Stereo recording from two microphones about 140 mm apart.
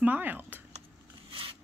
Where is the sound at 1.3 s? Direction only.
40° right (ahead or behind).